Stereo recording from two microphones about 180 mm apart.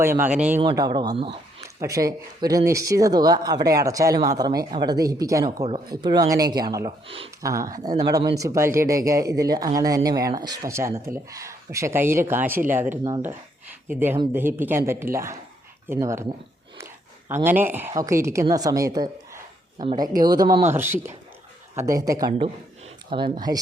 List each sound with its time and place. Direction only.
0.0 s speech: 10° right (ahead or behind)
0.6 s speech: 25° right (ahead or behind)
1.6 s speech: 20° right (ahead or behind)
13.2 s a sound: 10° right (ahead or behind)
14.3 s speech: 10° right (ahead or behind)
17.2 s speech: 10° right (ahead or behind)
19.8 s speech: 30° right (ahead or behind)
20.7 s speech: 10° right (ahead or behind)